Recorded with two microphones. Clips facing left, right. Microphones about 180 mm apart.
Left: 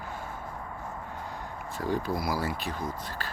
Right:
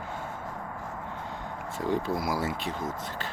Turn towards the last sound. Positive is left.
turn(degrees=-20)  # may be behind; listen again after turning